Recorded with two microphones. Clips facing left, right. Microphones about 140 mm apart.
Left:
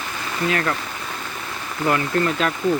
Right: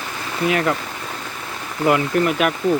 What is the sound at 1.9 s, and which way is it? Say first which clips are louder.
Speech: right 3 dB; 15° right (ahead or behind).